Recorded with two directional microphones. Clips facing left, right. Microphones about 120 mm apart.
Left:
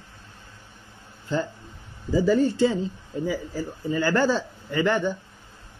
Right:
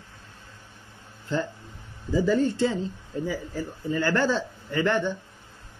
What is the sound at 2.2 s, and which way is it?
Speech, 15° left (ahead or behind).